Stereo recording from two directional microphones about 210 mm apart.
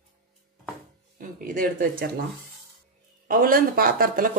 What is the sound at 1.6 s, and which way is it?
Speech, 45° right (ahead or behind).